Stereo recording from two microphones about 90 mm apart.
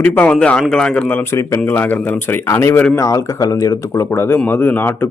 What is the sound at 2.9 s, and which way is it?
Speech, 40° left (ahead or behind).